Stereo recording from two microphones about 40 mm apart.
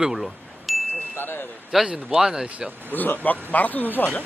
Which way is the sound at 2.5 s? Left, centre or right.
Right.